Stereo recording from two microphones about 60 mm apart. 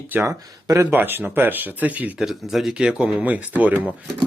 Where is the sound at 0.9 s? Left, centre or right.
Right.